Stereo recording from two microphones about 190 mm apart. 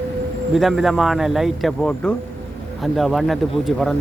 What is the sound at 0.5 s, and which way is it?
A man's voice, centre (ahead or behind).